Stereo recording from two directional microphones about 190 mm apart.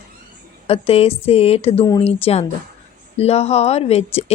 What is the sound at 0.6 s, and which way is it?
Speech, 30° left (ahead or behind).